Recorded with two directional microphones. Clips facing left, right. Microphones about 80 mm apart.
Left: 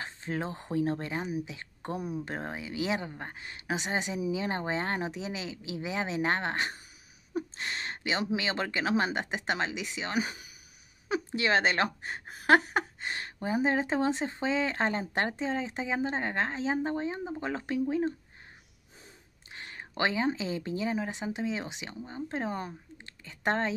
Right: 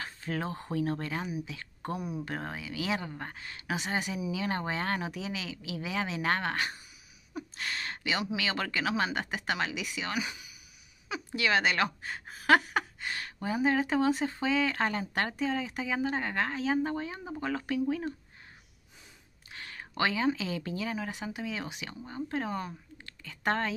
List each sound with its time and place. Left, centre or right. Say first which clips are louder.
0.0 s speech: even; left
10.1 s speech: left 3 dB; left
11.3 s speech: even; left
19.5 s a sound: even; left
20.0 s speech: even; left